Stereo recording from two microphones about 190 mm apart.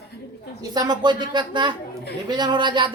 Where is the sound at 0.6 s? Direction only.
20° right (ahead or behind).